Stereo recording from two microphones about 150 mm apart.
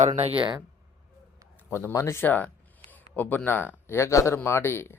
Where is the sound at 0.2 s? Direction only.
35° right (ahead or behind).